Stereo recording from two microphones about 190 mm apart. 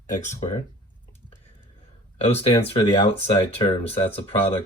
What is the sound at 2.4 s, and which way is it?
Speech, 30° left (ahead or behind).